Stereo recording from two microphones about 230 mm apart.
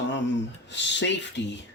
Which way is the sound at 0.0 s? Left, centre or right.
Left.